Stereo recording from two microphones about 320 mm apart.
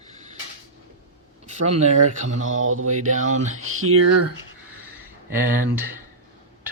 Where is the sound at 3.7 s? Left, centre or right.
Right.